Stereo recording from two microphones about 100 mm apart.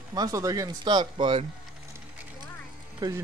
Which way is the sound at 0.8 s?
50° right (ahead or behind).